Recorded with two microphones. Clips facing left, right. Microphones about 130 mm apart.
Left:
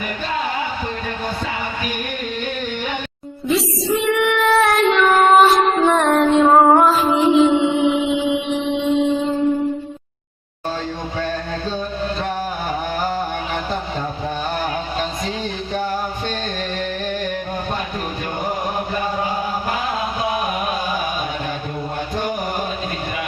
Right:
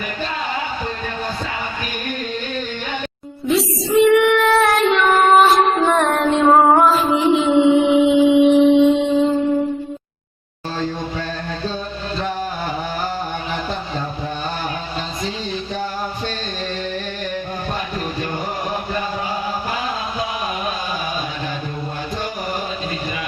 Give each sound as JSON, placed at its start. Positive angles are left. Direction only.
{"t": 3.4, "sound": "child singing", "side_deg": 0}